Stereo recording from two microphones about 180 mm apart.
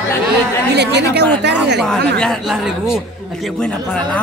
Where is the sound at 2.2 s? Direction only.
Centre (ahead or behind).